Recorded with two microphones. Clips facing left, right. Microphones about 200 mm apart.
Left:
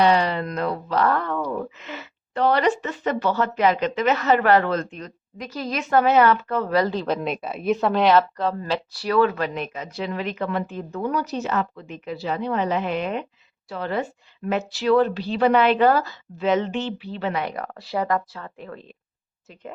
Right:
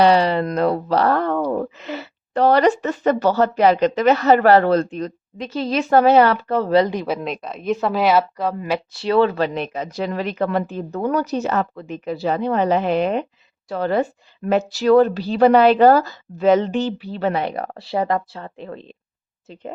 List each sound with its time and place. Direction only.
0.0 s speech: 35° right (ahead or behind)
6.8 s speech: 15° right (ahead or behind)
7.2 s speech: 5° left (ahead or behind); by 8.8 s 10° right (ahead or behind)
8.9 s speech: 25° right (ahead or behind)
11.0 s speech: 50° right (ahead or behind); by 18.9 s 25° right (ahead or behind)